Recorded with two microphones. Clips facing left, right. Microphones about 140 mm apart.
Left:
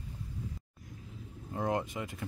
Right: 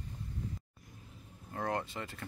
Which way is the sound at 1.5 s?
15° left (ahead or behind).